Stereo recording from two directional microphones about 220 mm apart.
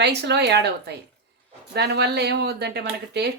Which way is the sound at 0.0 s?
50° right (ahead or behind).